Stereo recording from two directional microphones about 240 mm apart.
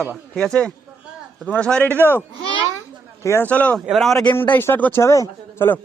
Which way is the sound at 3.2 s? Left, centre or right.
Centre.